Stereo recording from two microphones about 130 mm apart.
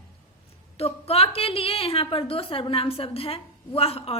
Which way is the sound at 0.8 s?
50° left (ahead or behind).